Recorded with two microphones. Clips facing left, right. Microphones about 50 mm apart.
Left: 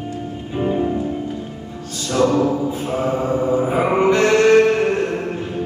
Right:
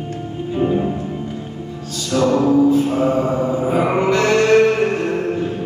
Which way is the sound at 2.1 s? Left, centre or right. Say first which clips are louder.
Right 1 dB; centre.